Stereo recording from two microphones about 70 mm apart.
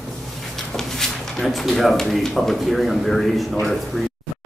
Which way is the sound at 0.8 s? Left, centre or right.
Centre.